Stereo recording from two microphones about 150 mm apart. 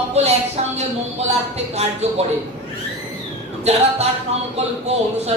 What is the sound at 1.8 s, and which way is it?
Speech, 45° right (ahead or behind).